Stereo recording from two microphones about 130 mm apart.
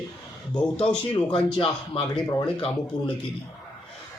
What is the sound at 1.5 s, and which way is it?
Speech, 40° left (ahead or behind).